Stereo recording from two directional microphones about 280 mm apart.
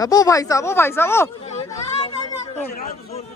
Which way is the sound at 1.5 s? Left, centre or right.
Left.